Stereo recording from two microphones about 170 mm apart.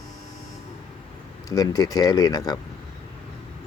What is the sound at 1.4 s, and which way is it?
Speech, 20° left (ahead or behind).